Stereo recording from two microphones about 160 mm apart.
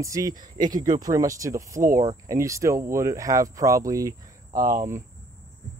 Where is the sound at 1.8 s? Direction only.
55° right (ahead or behind).